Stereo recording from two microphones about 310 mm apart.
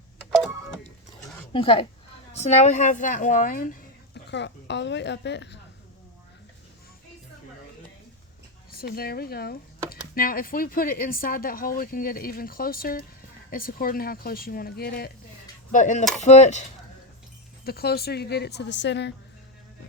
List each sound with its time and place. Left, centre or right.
1.5 s a woman's voice: centre; by 5.5 s left
8.7 s speech: left
17.7 s a woman's voice: left